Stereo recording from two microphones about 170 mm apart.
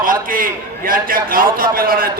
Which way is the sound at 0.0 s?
55° right (ahead or behind).